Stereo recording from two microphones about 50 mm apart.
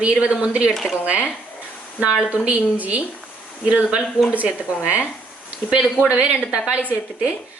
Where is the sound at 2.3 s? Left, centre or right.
Right.